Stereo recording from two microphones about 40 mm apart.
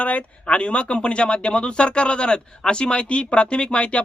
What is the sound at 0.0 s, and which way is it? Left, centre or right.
Speech, left.